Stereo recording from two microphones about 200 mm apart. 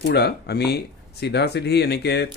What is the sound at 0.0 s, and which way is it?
Speech, 55° left (ahead or behind).